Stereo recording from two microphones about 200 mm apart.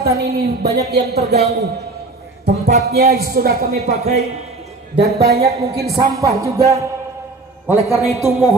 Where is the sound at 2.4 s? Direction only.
55° right (ahead or behind).